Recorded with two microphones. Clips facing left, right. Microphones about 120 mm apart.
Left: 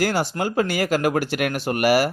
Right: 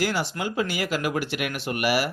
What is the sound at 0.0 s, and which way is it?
Speech, 45° left (ahead or behind).